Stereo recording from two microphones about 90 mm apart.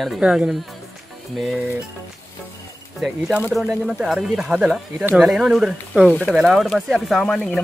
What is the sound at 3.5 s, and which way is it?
Speech, 5° right (ahead or behind).